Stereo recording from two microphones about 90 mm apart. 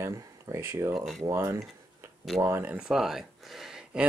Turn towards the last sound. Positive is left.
turn(degrees=-5)  # may be behind; listen again after turning